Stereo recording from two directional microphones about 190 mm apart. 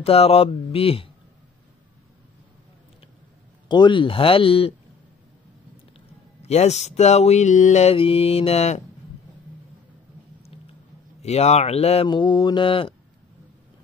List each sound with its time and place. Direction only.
0.0 s mantra: 30° left (ahead or behind)
3.6 s speech: 25° left (ahead or behind)
6.4 s mantra: 35° left (ahead or behind)
11.2 s speech: 35° left (ahead or behind)